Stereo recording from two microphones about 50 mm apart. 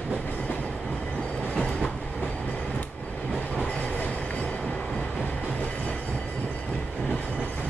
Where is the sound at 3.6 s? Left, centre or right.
Left.